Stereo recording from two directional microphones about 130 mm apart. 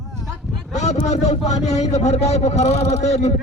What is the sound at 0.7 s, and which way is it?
A man's voice, 60° left (ahead or behind).